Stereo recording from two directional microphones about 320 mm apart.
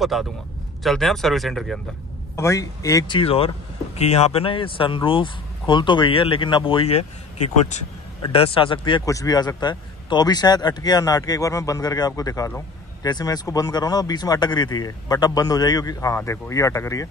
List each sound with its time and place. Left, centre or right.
0.0 s speech: centre